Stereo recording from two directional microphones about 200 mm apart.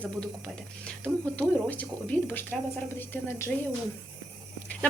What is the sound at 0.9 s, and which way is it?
Speech, 5° left (ahead or behind).